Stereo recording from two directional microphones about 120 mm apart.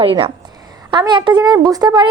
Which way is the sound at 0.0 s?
45° right (ahead or behind).